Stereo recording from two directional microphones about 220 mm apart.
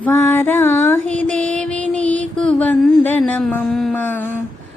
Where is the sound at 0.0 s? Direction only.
10° left (ahead or behind).